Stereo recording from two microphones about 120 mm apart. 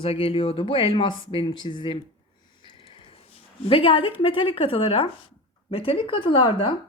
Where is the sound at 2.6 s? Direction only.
45° left (ahead or behind).